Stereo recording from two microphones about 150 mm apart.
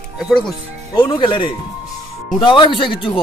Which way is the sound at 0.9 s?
30° left (ahead or behind).